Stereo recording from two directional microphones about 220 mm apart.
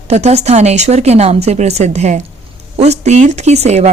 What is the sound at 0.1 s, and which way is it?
Speech, 30° right (ahead or behind).